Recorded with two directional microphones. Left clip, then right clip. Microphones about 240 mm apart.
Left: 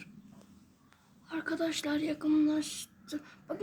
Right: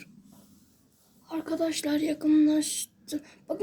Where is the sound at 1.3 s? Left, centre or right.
Centre.